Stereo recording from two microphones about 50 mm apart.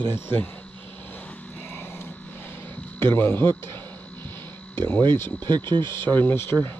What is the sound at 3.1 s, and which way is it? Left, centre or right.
Speech, left.